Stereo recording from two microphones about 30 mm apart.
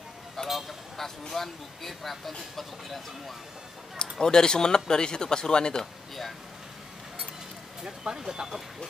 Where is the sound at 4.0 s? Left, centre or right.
Left.